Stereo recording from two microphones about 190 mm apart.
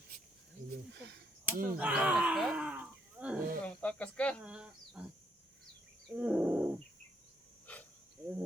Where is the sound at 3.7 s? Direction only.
5° left (ahead or behind).